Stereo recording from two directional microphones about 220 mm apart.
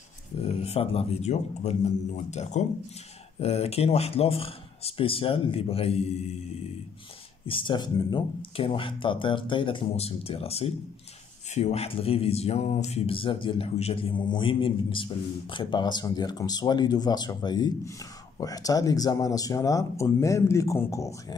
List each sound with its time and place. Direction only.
0.4 s speech: 25° left (ahead or behind)
7.4 s speech: 25° left (ahead or behind)